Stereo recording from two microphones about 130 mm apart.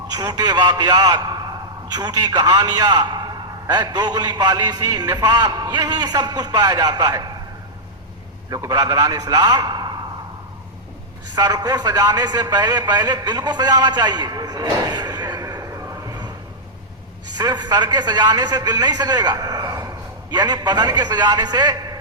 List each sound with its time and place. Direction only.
0.1 s a man's voice: 30° right (ahead or behind)
8.4 s a man's voice: 30° right (ahead or behind)
11.3 s speech: 30° right (ahead or behind)
17.3 s a man's voice: 30° right (ahead or behind)